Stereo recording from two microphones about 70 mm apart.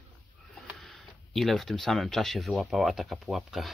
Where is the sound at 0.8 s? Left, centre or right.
Centre.